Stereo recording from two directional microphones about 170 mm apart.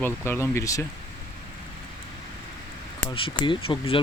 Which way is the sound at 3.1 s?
30° left (ahead or behind).